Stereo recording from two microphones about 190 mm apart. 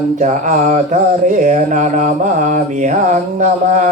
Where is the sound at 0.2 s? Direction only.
40° right (ahead or behind).